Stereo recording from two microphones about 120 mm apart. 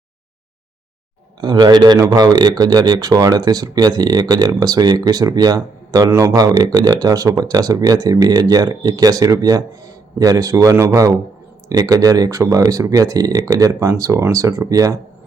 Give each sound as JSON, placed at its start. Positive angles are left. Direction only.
{"t": 1.4, "sound": "speech", "side_deg": -35}